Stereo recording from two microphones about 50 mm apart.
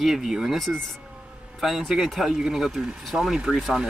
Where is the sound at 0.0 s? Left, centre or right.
Centre.